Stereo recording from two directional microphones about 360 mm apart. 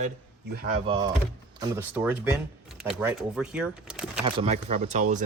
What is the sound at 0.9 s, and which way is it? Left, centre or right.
Speech, centre.